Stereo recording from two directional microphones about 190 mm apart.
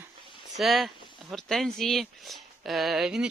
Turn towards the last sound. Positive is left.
turn(degrees=0)  # may be behind; listen again after turning